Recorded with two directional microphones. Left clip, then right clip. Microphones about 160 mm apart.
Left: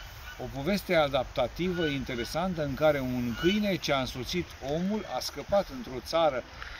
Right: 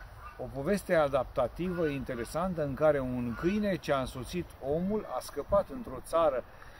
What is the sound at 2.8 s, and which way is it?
Speech, 30° right (ahead or behind).